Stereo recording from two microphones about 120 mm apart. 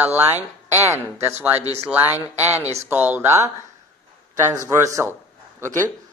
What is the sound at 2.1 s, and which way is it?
Speech, 30° left (ahead or behind).